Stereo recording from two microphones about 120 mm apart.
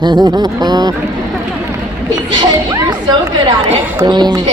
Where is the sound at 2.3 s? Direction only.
35° right (ahead or behind).